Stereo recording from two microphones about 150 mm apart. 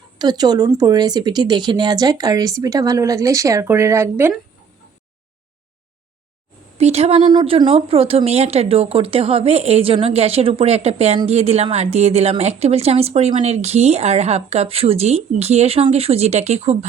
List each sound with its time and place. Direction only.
0.2 s speech: 30° right (ahead or behind)
6.7 s a woman's voice: 45° right (ahead or behind)
7.2 s a woman's voice: 30° right (ahead or behind)